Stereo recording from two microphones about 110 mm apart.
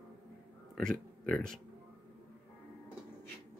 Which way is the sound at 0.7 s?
5° left (ahead or behind).